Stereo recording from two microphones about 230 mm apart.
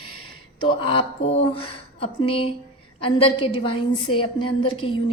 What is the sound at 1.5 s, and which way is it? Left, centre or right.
A woman's voice, left.